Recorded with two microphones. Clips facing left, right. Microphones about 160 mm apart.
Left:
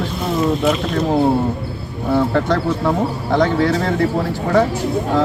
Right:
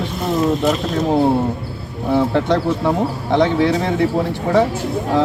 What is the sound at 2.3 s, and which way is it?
Speech, 20° right (ahead or behind).